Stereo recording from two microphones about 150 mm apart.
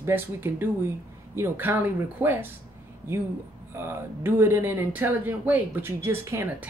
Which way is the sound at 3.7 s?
15° right (ahead or behind).